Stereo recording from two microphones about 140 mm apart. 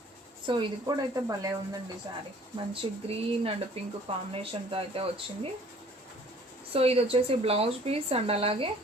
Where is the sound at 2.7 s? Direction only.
40° right (ahead or behind).